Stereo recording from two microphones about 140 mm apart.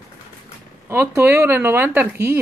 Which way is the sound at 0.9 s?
15° right (ahead or behind).